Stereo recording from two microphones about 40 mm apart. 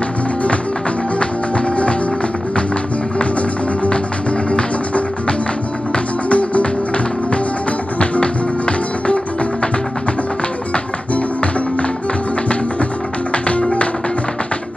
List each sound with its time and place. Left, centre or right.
4.5 s music: left
6.2 s music: left
8.0 s music: left
13.3 s music: left